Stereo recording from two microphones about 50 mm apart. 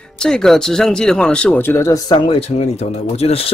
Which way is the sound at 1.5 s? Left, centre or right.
Left.